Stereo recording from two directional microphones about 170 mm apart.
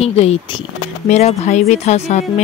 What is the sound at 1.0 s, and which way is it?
Speech, 40° left (ahead or behind).